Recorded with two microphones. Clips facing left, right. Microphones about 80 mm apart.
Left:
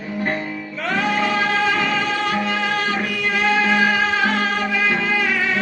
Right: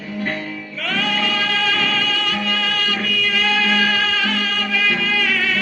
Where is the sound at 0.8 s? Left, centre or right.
Left.